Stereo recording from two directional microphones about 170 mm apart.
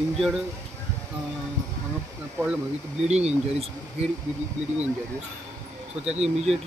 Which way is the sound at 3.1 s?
40° right (ahead or behind).